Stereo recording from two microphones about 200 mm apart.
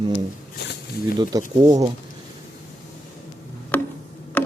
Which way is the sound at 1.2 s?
20° right (ahead or behind).